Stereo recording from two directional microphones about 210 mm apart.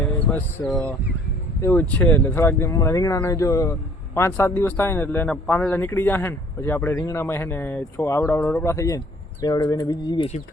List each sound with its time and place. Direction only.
0.0 s speech: 10° left (ahead or behind); by 10.4 s 25° left (ahead or behind)